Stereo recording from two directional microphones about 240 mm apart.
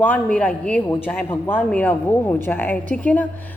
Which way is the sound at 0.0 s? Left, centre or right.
Centre.